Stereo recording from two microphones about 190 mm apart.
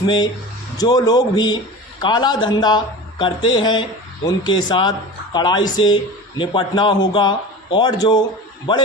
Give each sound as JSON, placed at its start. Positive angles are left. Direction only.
{"t": 0.0, "sound": "speech", "side_deg": 25}